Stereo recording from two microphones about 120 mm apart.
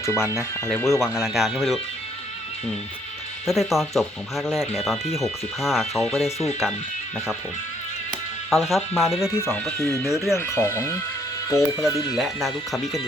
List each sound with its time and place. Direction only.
0.0 s speech: 25° left (ahead or behind)
1.0 s speech: 5° right (ahead or behind)
3.4 s speech: centre (ahead or behind)
8.4 s speech: centre (ahead or behind)
9.7 s speech: 20° left (ahead or behind)
10.1 s speech: centre (ahead or behind)
10.3 s speech: 25° left (ahead or behind)
12.1 s speech: centre (ahead or behind)